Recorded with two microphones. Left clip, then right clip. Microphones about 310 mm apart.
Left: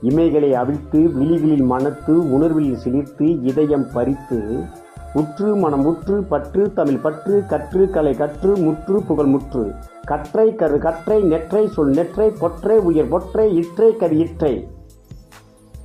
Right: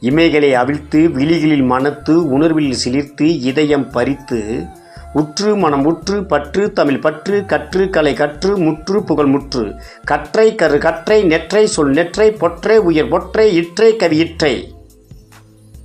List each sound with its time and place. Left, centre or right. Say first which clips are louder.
0.0 s speech: right 4 dB; right
2.7 s speech: right 4 dB; centre
3.2 s speech: right 3 dB; right
5.1 s speech: right 4 dB; right